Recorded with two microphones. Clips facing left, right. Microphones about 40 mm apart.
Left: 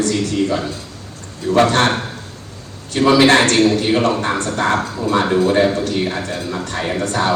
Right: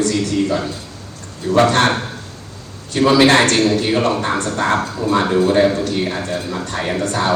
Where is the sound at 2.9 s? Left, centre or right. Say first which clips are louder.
Even; left.